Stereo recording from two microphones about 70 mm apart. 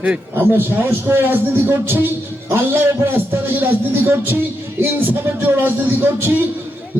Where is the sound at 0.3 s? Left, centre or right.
Right.